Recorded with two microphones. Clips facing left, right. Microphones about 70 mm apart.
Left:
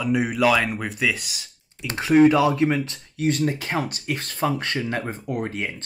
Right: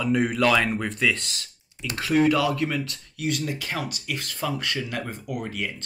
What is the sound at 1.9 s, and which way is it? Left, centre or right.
Speech, left.